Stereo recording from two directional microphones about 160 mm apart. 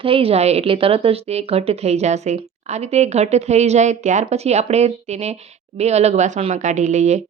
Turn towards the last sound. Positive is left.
turn(degrees=-45)  # may be behind; listen again after turning